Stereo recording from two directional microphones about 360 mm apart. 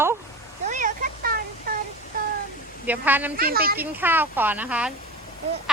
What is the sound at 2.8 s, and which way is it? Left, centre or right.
Speech, centre.